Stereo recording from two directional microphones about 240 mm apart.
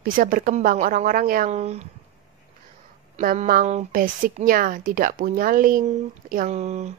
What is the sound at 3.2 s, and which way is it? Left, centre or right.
A woman's voice, right.